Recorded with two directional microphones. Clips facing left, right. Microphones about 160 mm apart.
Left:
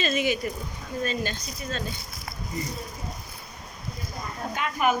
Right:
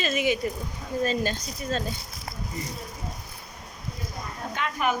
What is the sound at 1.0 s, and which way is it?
Speech, 40° right (ahead or behind).